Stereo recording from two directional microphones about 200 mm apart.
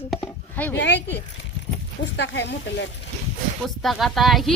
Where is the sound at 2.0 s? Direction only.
60° left (ahead or behind).